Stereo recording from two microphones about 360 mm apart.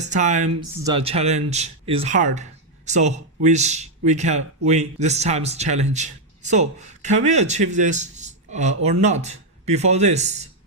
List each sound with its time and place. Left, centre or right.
0.0 s speech: centre